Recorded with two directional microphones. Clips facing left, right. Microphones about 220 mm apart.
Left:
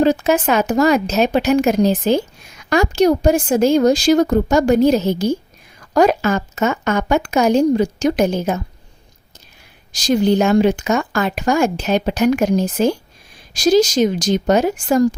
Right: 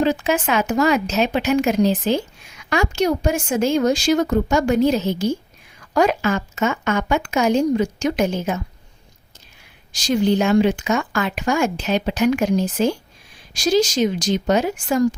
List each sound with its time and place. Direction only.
0.0 s speech: 40° left (ahead or behind)
9.9 s speech: 40° left (ahead or behind)